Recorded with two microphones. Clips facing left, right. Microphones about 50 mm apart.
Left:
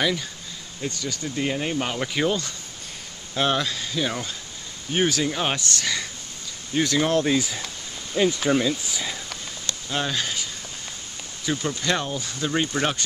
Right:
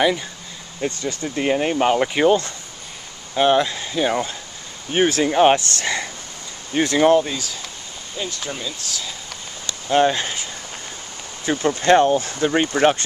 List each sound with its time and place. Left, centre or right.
0.7 s speech: right
7.2 s speech: centre
9.8 s speech: right
12.4 s speech: right